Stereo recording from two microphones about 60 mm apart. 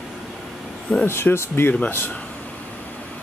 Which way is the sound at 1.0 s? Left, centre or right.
Left.